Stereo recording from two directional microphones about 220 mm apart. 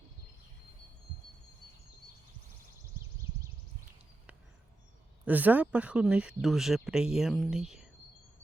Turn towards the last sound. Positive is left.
turn(degrees=0)  # may be behind; listen again after turning